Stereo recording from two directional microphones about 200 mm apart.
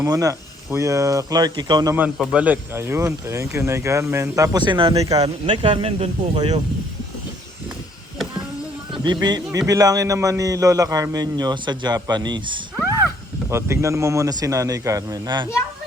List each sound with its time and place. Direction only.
0.0 s speech: 15° right (ahead or behind)
2.0 s speech: 5° right (ahead or behind); by 6.6 s 20° right (ahead or behind)
9.2 s speech: 20° right (ahead or behind)